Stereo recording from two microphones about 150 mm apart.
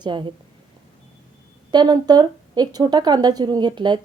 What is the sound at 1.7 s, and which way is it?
A woman's voice, 30° right (ahead or behind).